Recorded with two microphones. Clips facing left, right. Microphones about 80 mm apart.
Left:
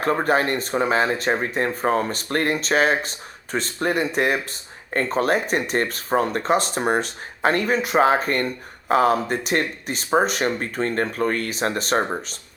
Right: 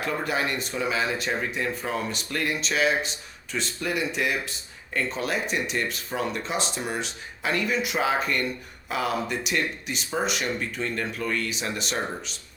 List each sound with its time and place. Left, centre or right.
0.0 s speech: left